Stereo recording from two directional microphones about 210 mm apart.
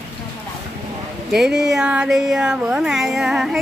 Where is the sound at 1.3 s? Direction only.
Centre (ahead or behind).